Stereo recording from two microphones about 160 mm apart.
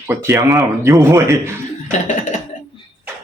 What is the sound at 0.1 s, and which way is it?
A man's voice, 15° right (ahead or behind).